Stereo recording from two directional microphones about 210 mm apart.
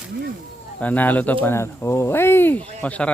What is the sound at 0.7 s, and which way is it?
Speech, 5° left (ahead or behind).